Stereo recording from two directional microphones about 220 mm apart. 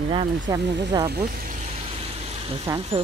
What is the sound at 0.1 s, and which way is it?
Speech, 25° right (ahead or behind).